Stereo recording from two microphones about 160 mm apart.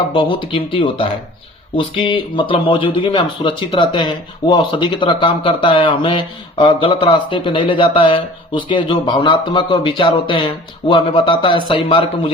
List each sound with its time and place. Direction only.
0.1 s speech: 30° left (ahead or behind)